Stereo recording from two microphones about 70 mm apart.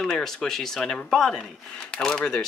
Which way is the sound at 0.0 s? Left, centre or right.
Centre.